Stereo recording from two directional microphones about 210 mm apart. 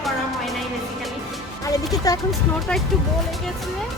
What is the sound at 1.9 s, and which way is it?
Speech, 15° left (ahead or behind).